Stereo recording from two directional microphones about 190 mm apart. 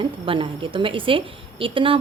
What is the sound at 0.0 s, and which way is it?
A woman's voice, 30° right (ahead or behind).